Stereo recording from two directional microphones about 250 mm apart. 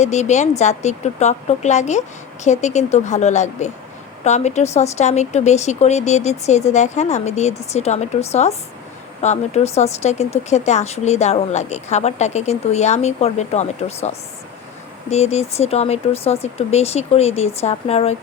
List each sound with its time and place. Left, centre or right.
0.0 s speech: left
15.1 s speech: left